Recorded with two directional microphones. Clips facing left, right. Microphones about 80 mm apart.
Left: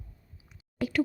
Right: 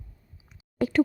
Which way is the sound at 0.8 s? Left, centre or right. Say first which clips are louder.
Right 5 dB; centre.